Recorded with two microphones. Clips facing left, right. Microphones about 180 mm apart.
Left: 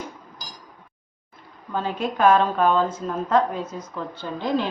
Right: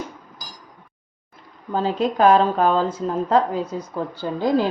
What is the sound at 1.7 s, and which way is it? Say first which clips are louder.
A woman's voice: right 5 dB; 35° right (ahead or behind).